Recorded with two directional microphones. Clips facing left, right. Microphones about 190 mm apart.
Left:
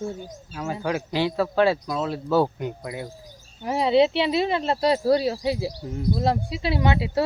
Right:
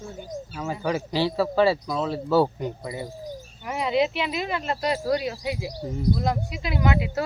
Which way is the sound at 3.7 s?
30° left (ahead or behind).